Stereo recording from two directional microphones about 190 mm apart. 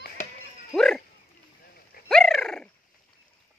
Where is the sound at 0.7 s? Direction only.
Centre (ahead or behind).